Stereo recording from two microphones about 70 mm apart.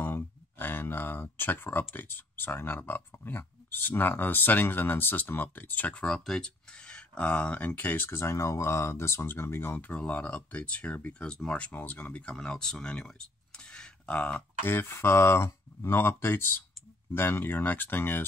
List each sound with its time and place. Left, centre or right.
0.0 s speech: left
9.8 s speech: centre
11.7 s speech: left
14.6 s speech: left